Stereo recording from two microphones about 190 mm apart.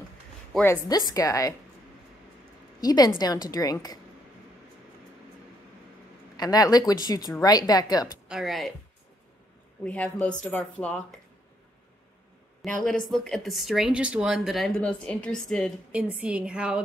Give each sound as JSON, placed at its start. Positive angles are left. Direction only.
{"t": 0.5, "sound": "speech", "side_deg": 5}
{"t": 2.8, "sound": "a woman's voice", "side_deg": 20}
{"t": 6.3, "sound": "a woman's voice", "side_deg": 20}
{"t": 8.3, "sound": "speech", "side_deg": 0}
{"t": 9.8, "sound": "speech", "side_deg": 5}
{"t": 12.6, "sound": "speech", "side_deg": 5}
{"t": 15.9, "sound": "speech", "side_deg": -5}